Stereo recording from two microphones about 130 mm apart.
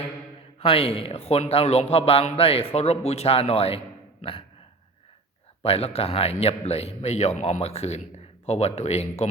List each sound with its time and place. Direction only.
0.6 s a man's voice: 45° left (ahead or behind)
4.2 s a sound: 45° left (ahead or behind)
5.6 s a man's voice: 50° left (ahead or behind)